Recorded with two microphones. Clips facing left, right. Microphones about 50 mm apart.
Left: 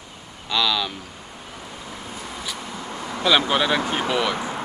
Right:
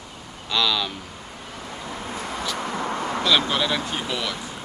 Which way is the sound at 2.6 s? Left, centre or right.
Right.